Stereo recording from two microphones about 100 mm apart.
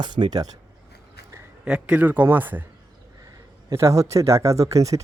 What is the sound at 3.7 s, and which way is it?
Speech, 30° right (ahead or behind).